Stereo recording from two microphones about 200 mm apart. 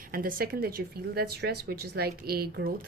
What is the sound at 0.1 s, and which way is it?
A woman's voice, 45° right (ahead or behind).